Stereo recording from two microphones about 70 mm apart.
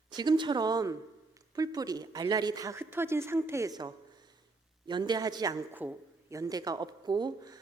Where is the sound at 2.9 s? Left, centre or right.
Right.